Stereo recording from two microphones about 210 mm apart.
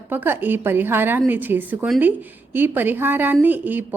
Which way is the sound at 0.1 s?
10° right (ahead or behind).